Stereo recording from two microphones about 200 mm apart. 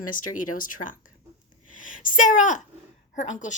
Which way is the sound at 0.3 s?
45° left (ahead or behind).